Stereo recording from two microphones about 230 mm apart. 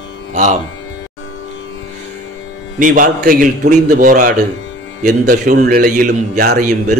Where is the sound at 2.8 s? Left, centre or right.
Right.